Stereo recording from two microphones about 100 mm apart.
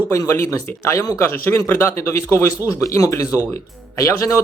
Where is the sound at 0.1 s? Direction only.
30° left (ahead or behind).